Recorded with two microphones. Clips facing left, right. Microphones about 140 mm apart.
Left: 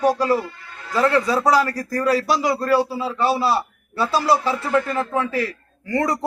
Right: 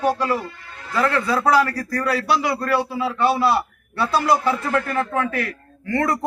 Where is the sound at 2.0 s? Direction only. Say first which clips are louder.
Left 2 dB; 35° left (ahead or behind).